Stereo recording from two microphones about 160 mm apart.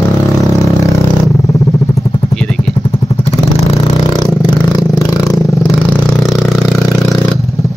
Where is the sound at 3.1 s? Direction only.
40° left (ahead or behind).